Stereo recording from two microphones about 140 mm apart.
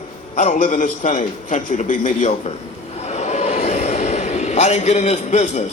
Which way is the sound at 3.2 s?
50° left (ahead or behind).